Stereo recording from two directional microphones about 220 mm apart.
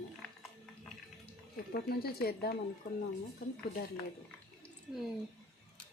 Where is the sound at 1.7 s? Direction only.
45° left (ahead or behind).